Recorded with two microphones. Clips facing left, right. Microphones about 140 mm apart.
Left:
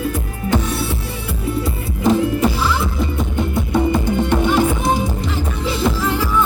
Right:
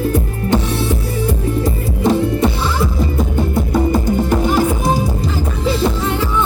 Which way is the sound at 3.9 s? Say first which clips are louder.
Right 2 dB; 40° right (ahead or behind).